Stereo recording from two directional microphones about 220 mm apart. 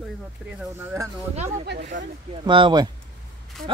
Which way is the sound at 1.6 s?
50° right (ahead or behind).